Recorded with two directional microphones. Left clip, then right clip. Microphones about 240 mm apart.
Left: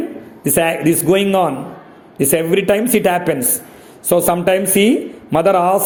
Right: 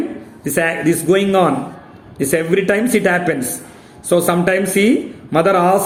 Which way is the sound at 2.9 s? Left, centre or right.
Left.